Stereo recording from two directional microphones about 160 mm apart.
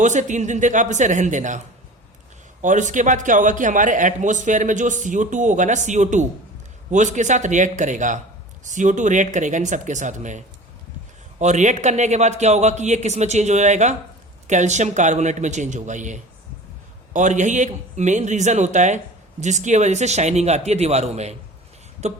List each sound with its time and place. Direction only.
0.0 s a man's voice: 50° right (ahead or behind)